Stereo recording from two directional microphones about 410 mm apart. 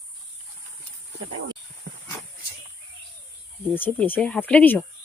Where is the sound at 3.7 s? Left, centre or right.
Centre.